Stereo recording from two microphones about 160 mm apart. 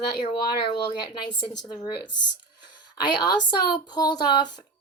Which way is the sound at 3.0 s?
25° left (ahead or behind).